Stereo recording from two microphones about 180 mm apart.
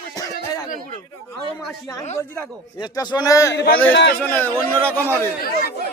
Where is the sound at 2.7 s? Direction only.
25° left (ahead or behind).